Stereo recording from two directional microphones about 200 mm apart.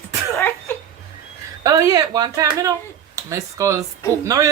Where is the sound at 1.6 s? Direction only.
15° right (ahead or behind).